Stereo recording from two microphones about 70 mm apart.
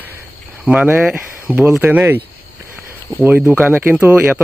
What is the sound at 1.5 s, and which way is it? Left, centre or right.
Speech, right.